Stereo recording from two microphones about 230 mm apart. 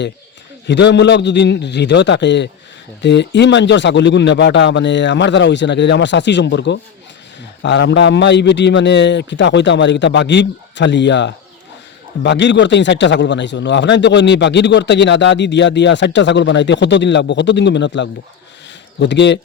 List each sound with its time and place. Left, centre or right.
0.7 s a man's voice: left